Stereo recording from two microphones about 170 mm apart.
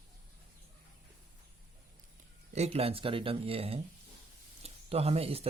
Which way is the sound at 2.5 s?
40° right (ahead or behind).